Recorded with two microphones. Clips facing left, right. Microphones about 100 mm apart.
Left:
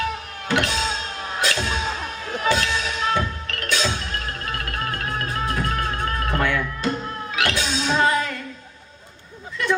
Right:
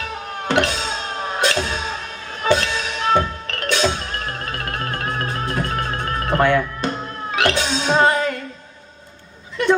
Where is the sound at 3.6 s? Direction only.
55° right (ahead or behind).